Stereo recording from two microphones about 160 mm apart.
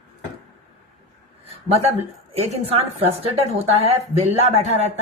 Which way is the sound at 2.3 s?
40° right (ahead or behind).